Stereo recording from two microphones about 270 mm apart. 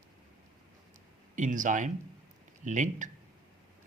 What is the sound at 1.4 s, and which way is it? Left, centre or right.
Speech, right.